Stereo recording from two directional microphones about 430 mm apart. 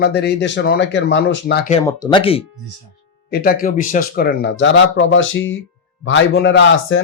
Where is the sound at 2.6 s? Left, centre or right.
Right.